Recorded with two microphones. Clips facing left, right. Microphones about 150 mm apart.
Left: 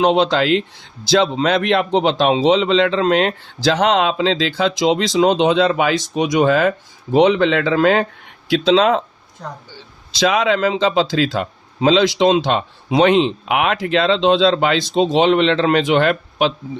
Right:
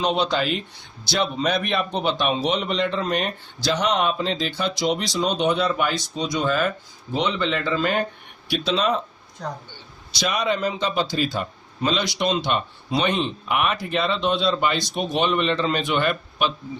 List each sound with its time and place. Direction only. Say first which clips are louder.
0.0 s a man's voice: left 7 dB; 90° left
10.2 s a man's voice: left 7 dB; 90° left